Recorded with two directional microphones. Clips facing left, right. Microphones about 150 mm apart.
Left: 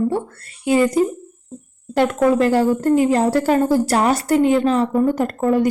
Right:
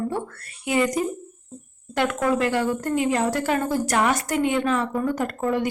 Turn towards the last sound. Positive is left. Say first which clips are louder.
# left 6 dB
turn(degrees=45)  # may be behind; listen again after turning